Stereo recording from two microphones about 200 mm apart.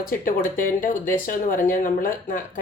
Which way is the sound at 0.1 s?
45° left (ahead or behind).